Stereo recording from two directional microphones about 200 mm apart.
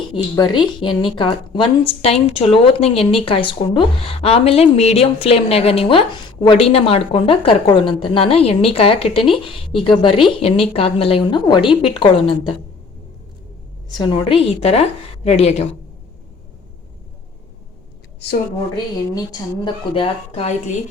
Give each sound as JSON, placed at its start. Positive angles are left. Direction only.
{"t": 0.1, "sound": "a woman's voice", "side_deg": 20}
{"t": 13.9, "sound": "a woman's voice", "side_deg": 25}
{"t": 19.1, "sound": "a woman's voice", "side_deg": 20}